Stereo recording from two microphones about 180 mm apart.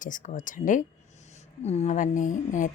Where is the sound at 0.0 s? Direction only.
45° left (ahead or behind).